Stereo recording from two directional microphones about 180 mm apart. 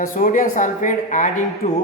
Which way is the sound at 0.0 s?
50° left (ahead or behind).